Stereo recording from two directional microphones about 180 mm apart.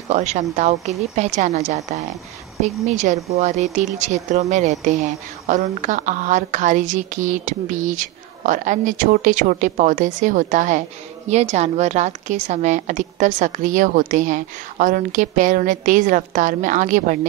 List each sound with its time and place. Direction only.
0.1 s a woman's voice: 40° right (ahead or behind)